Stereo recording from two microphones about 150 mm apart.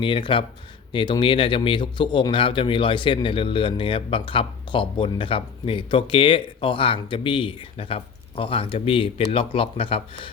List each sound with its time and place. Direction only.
0.0 s a man's voice: 35° left (ahead or behind)